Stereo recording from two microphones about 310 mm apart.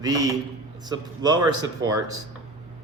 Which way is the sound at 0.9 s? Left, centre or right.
Centre.